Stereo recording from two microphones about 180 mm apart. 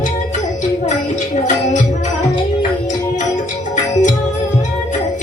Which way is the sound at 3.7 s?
45° left (ahead or behind).